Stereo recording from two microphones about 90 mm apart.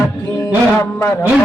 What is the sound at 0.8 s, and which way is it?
Speech, 30° left (ahead or behind).